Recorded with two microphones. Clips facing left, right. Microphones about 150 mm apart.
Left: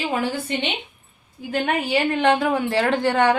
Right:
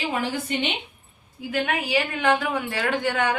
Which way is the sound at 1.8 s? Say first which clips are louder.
Left 5 dB; 30° left (ahead or behind).